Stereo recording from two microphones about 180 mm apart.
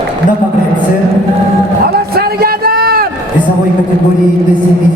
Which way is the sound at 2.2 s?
60° right (ahead or behind).